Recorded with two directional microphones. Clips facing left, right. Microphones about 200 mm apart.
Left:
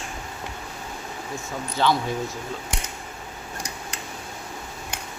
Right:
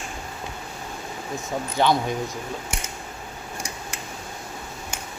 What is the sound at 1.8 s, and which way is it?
Speech, 15° right (ahead or behind).